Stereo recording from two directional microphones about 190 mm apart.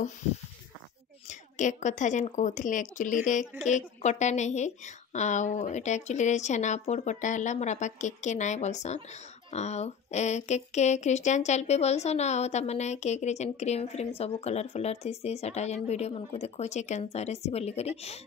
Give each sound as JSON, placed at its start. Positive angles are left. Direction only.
{"t": 1.2, "sound": "speech", "side_deg": 40}